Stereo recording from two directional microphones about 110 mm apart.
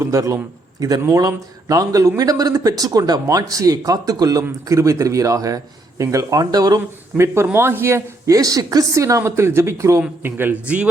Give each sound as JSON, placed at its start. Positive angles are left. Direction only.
{"t": 0.0, "sound": "a woman's voice", "side_deg": -30}